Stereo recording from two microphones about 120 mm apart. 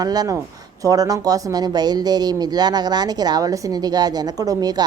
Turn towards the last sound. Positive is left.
turn(degrees=-30)  # may be behind; listen again after turning